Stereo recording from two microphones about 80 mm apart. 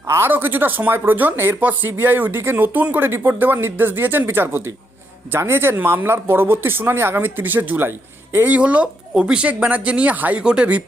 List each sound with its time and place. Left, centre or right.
0.1 s speech: right